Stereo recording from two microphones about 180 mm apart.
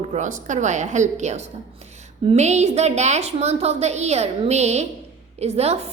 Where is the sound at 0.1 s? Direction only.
45° right (ahead or behind).